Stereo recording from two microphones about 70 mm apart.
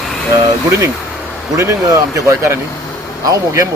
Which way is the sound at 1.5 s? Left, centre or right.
Right.